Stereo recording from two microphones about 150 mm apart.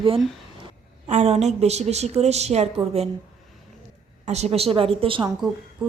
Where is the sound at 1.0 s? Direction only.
45° right (ahead or behind).